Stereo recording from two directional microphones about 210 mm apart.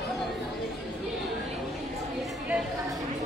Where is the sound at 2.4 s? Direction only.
5° right (ahead or behind).